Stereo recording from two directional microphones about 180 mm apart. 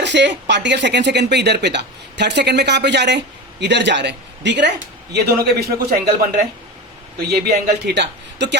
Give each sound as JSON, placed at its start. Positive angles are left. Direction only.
{"t": 0.0, "sound": "speech", "side_deg": -75}
{"t": 5.1, "sound": "a man's voice", "side_deg": -60}